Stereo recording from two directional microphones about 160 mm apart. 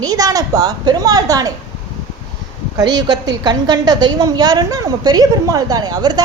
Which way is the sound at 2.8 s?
25° right (ahead or behind).